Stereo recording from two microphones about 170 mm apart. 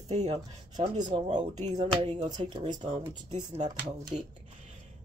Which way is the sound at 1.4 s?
25° right (ahead or behind).